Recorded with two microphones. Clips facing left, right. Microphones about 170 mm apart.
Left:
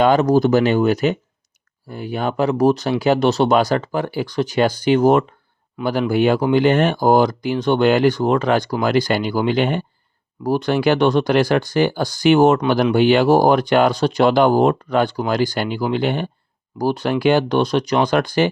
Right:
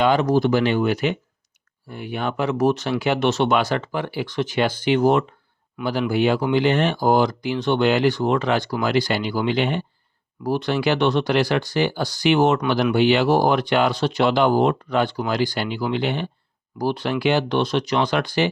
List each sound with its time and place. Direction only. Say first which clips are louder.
0.0 s speech: left 4 dB; 45° left (ahead or behind)